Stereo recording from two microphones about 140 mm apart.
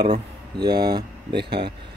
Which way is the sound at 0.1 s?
30° right (ahead or behind).